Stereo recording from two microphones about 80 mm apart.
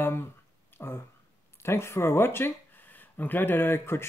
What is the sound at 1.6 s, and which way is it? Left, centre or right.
Speech, left.